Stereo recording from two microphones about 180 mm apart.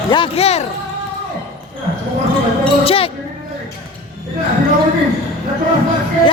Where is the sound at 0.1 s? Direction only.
30° left (ahead or behind).